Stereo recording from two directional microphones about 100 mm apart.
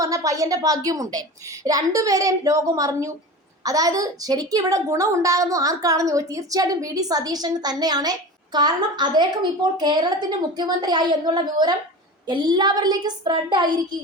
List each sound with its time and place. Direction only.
0.0 s a woman's voice: 35° right (ahead or behind); by 13.7 s 50° right (ahead or behind)